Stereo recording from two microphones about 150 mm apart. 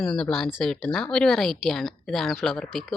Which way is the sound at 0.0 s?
5° left (ahead or behind).